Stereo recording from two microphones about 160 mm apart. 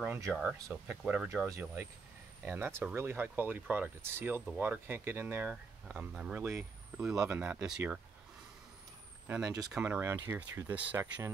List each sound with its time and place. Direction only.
0.3 s speech: 5° left (ahead or behind)
9.3 s speech: 20° right (ahead or behind)
9.7 s speech: 10° right (ahead or behind)